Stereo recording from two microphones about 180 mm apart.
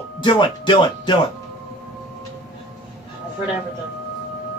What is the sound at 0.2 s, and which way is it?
Speech, 25° left (ahead or behind).